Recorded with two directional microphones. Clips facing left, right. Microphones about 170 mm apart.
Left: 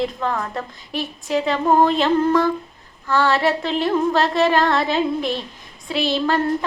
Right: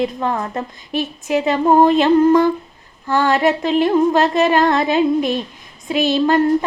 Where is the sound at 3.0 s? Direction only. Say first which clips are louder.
Right 3 dB; 15° right (ahead or behind).